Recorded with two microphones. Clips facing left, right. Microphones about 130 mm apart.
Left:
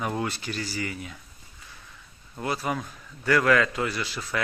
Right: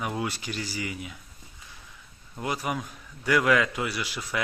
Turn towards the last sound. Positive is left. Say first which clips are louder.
# left 1 dB
turn(degrees=-15)  # may be behind; listen again after turning